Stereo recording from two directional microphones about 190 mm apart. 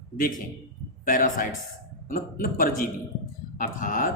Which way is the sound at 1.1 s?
45° left (ahead or behind).